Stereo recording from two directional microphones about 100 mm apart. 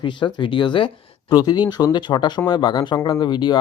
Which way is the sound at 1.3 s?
45° left (ahead or behind).